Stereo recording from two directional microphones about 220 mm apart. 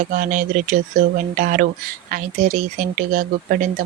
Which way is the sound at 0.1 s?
35° right (ahead or behind).